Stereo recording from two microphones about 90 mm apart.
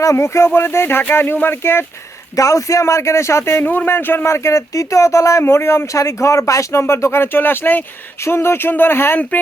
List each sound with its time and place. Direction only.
0.0 s speech: 35° left (ahead or behind)
2.3 s speech: 35° left (ahead or behind)